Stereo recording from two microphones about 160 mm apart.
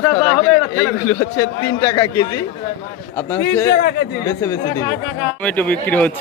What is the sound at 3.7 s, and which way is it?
Speech, 80° left.